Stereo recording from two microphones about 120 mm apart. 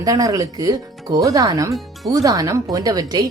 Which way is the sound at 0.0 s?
30° right (ahead or behind).